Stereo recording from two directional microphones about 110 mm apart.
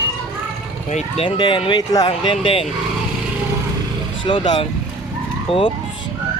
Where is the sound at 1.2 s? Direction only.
50° left (ahead or behind).